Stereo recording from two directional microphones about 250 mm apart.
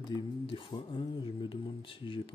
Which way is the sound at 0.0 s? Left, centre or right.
Centre.